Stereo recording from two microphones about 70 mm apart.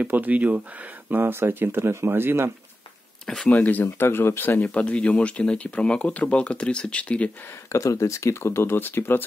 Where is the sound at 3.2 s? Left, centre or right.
Centre.